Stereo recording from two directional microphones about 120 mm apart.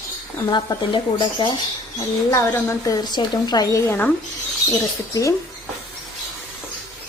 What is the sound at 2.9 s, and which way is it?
Speech, 35° left (ahead or behind).